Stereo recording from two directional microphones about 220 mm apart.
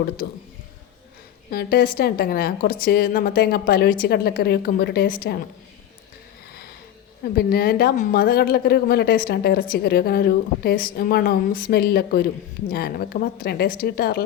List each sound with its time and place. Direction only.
1.5 s a woman's voice: 45° left (ahead or behind)
7.3 s a woman's voice: 45° left (ahead or behind)